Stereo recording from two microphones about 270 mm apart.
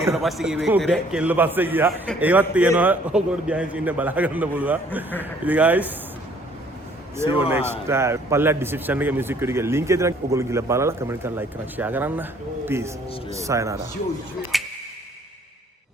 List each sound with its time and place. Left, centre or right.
0.0 s a man's voice: centre
7.3 s a man's voice: centre
14.5 s a sound: centre